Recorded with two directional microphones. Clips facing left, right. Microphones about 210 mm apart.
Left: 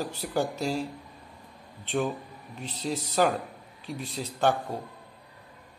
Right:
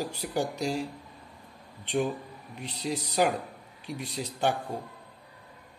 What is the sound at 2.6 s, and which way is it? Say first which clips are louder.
Speech: left 1 dB; 15° right (ahead or behind).